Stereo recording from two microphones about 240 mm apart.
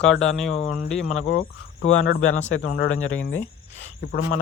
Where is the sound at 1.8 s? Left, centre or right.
Left.